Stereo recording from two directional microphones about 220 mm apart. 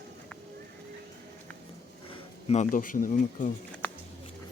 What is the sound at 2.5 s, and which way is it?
Speech, 35° left (ahead or behind).